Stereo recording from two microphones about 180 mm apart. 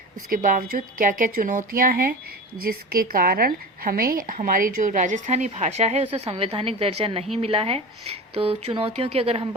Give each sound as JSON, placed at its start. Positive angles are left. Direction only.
{"t": 0.3, "sound": "a woman's voice", "side_deg": -50}